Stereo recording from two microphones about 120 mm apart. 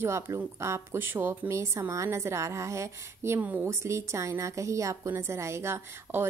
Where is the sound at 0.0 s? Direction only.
25° right (ahead or behind).